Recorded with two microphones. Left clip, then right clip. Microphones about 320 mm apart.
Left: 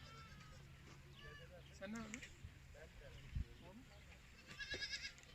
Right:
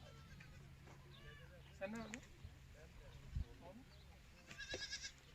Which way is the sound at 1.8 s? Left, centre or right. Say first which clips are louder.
Right 3 dB; right.